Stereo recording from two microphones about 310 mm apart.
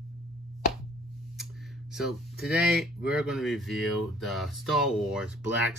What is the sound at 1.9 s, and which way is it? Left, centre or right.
Speech, centre.